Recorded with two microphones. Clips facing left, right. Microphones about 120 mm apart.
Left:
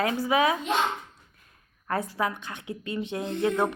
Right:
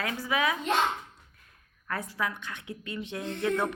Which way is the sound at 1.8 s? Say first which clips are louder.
Left 5 dB; 35° left (ahead or behind).